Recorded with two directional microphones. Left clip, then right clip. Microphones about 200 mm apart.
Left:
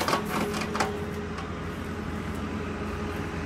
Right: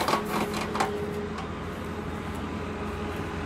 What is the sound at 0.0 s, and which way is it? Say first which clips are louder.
Printer: right 1 dB; 35° right (ahead or behind).